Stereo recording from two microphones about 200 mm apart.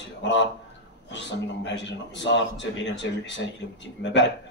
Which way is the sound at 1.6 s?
60° left (ahead or behind).